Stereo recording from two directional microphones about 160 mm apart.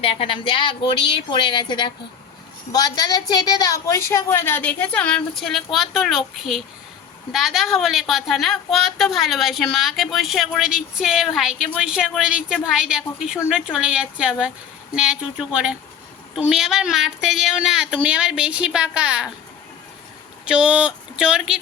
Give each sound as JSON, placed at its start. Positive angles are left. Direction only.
{"t": 0.0, "sound": "a woman's voice", "side_deg": 35}
{"t": 20.4, "sound": "speech", "side_deg": -5}